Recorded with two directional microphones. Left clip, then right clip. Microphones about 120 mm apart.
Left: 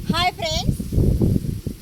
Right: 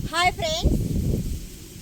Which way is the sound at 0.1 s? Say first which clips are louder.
Left 1 dB; 20° right (ahead or behind).